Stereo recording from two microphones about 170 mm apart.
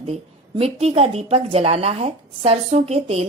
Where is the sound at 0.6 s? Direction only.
35° right (ahead or behind).